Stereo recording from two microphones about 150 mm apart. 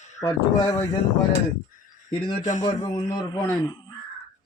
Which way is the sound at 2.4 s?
55° left (ahead or behind).